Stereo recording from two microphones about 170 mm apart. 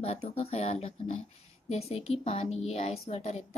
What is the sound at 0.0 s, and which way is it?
A woman's voice, 35° left (ahead or behind).